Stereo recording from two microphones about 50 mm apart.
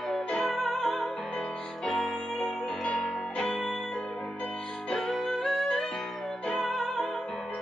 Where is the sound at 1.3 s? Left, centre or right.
Centre.